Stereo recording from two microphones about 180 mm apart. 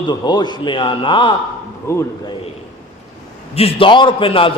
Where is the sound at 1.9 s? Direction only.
15° left (ahead or behind).